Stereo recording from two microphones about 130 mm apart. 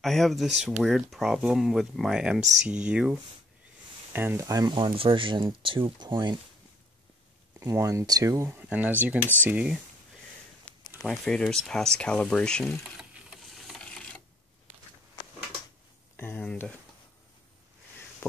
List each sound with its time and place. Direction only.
0.0 s speech: centre (ahead or behind); by 6.3 s 35° right (ahead or behind)
7.6 s speech: 25° right (ahead or behind)
11.0 s speech: 5° left (ahead or behind)
13.6 s a sound: 5° left (ahead or behind)
16.2 s speech: 15° left (ahead or behind)